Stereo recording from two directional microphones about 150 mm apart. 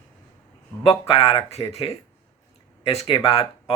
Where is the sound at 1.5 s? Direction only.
45° left (ahead or behind).